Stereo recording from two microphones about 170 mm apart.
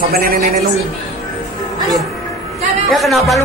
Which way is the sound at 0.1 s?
60° right (ahead or behind).